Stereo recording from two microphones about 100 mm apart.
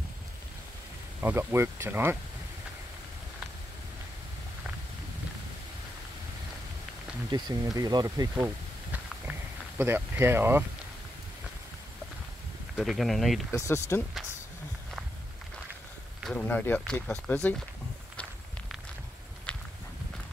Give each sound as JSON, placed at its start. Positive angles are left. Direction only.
{"t": 1.2, "sound": "speech", "side_deg": -25}
{"t": 7.2, "sound": "speech", "side_deg": -45}
{"t": 8.9, "sound": "a sound", "side_deg": -20}
{"t": 12.7, "sound": "speech", "side_deg": 0}
{"t": 13.5, "sound": "speech", "side_deg": 30}
{"t": 16.3, "sound": "speech", "side_deg": 15}
{"t": 19.5, "sound": "walk", "side_deg": 10}